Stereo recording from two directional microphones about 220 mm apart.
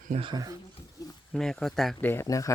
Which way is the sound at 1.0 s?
15° left (ahead or behind).